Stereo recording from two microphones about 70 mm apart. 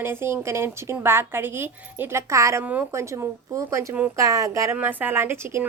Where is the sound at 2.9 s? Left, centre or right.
Right.